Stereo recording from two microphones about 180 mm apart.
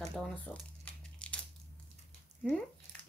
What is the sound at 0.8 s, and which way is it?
Crumpling, 5° left (ahead or behind).